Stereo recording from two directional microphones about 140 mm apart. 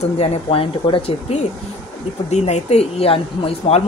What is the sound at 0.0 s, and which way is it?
A woman's voice, 45° left (ahead or behind).